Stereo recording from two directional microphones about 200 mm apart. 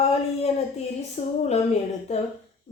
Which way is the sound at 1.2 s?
30° left (ahead or behind).